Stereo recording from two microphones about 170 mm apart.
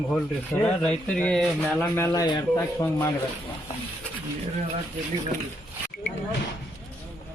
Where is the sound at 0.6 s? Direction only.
10° left (ahead or behind).